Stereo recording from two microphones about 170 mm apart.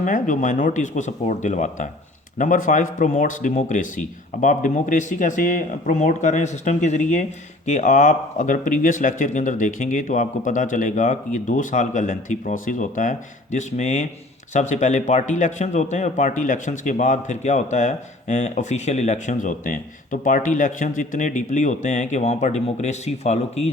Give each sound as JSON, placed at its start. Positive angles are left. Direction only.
{"t": 0.0, "sound": "speech", "side_deg": 50}